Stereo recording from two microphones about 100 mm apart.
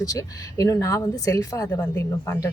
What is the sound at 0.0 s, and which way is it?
Speech, 35° left (ahead or behind).